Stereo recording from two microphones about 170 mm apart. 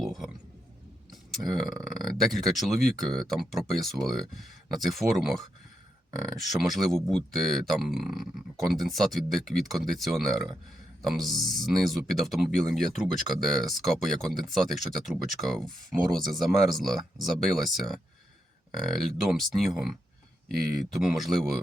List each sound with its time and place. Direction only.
0.0 s a sound: centre (ahead or behind)
1.1 s speech: centre (ahead or behind)
6.1 s speech: 20° right (ahead or behind)
6.5 s speech: centre (ahead or behind)
19.3 s speech: centre (ahead or behind)